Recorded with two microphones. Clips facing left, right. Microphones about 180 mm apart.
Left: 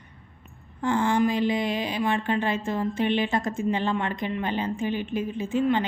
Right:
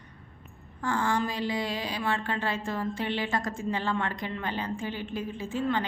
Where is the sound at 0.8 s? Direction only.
20° left (ahead or behind).